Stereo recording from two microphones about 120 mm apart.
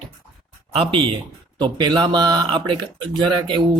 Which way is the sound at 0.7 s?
45° right (ahead or behind).